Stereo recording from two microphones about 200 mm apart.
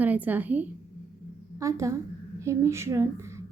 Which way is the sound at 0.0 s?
10° right (ahead or behind).